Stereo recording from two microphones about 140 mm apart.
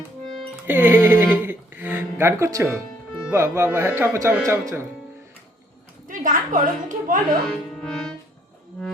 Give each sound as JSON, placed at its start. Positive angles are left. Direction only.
{"t": 0.7, "sound": "a sound", "side_deg": -15}
{"t": 3.2, "sound": "speech", "side_deg": -20}
{"t": 6.1, "sound": "a woman's voice", "side_deg": -70}
{"t": 7.4, "sound": "music", "side_deg": 5}